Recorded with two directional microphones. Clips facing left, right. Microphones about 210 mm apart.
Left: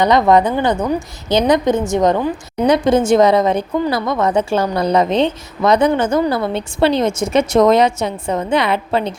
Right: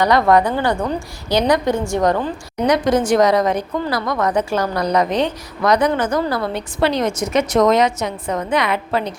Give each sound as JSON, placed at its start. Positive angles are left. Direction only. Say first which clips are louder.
{"t": 0.0, "sound": "speech", "louder": "left 2 dB", "side_deg": 20}